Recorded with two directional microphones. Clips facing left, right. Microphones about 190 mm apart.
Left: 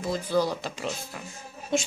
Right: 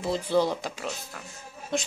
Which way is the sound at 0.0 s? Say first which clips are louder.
Right 1 dB; 25° right (ahead or behind).